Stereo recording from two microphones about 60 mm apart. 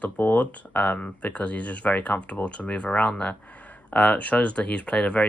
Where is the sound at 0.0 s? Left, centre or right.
Left.